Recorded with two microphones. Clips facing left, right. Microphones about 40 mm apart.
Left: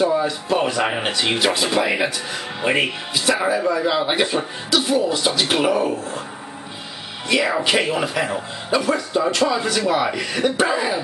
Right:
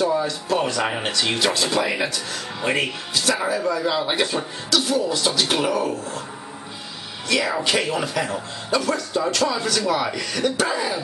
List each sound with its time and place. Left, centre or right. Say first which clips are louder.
0.0 s speech: left 2 dB; centre
7.2 s speech: left 3 dB; centre